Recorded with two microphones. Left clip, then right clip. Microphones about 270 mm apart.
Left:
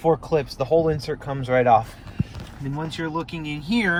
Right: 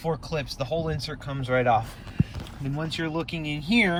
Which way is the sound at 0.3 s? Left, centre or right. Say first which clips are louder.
Left 8 dB; centre.